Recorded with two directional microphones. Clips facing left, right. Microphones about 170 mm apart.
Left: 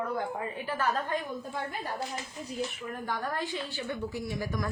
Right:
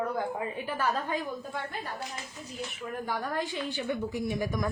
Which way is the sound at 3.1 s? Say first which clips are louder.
Even; 15° right (ahead or behind).